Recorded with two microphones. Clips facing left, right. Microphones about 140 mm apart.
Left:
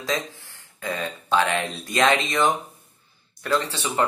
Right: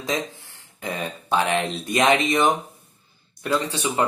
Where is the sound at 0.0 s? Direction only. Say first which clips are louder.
Right 1 dB; 20° right (ahead or behind).